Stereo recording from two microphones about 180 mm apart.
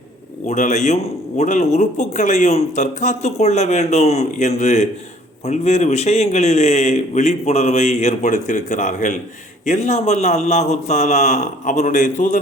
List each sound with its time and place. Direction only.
0.4 s a man's voice: 40° left (ahead or behind)